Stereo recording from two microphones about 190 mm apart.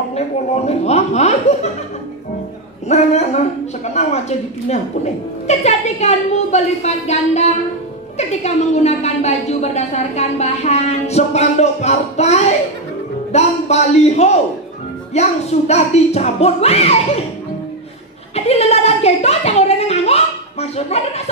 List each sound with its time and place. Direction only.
0.7 s chuckle: 35° left (ahead or behind)
2.9 s a woman's voice: 35° left (ahead or behind)
18.3 s a sound: 35° left (ahead or behind)